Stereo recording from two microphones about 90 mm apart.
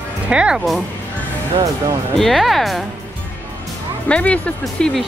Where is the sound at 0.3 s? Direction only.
10° right (ahead or behind).